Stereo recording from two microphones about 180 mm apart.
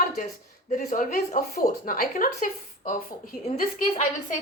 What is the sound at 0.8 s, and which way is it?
Speech, 50° left (ahead or behind).